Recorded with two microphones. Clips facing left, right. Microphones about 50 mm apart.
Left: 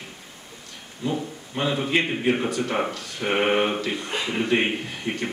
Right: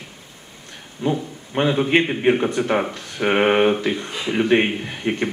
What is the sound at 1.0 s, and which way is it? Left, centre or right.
A man's voice, right.